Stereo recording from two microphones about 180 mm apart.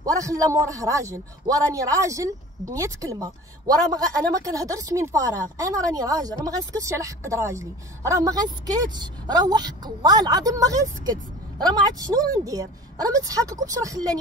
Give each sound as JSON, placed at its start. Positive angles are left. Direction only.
{"t": 0.0, "sound": "a man's voice", "side_deg": -20}